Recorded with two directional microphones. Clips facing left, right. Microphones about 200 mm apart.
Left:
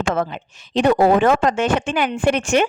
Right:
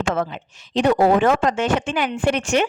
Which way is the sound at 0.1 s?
55° left (ahead or behind).